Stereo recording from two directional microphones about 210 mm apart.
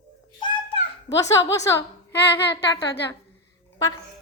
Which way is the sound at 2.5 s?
55° left (ahead or behind).